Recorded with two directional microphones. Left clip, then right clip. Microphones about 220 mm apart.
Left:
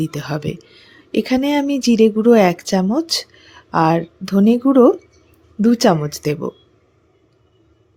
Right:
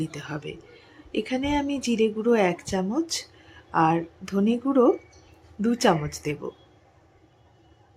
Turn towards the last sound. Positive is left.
turn(degrees=35)  # may be behind; listen again after turning